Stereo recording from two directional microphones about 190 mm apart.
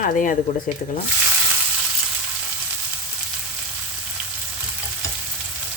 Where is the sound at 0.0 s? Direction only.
45° left (ahead or behind).